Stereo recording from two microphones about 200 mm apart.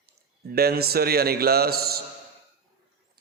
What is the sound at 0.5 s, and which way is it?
Mantra, 50° right (ahead or behind).